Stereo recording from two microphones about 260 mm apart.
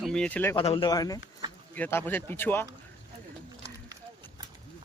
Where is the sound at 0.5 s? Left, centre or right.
Left.